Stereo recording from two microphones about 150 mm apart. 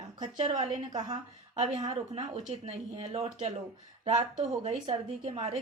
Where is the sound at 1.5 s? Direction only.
50° right (ahead or behind).